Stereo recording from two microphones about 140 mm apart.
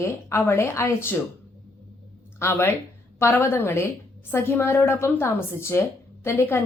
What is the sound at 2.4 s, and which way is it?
A woman's voice, 15° left (ahead or behind).